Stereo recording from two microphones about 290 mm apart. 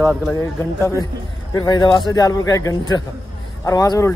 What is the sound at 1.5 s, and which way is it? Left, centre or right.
Speech, centre.